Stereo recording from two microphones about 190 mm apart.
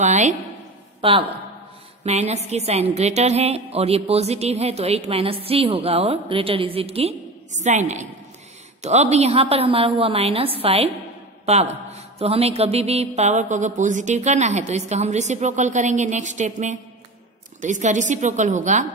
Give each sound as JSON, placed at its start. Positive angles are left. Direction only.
{"t": 0.0, "sound": "a woman's voice", "side_deg": -40}
{"t": 1.0, "sound": "a woman's voice", "side_deg": -30}